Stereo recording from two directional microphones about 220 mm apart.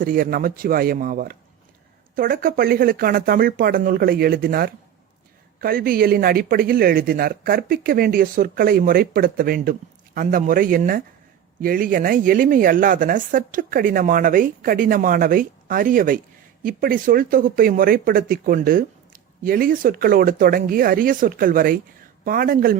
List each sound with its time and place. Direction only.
0.0 s a woman's voice: 40° right (ahead or behind)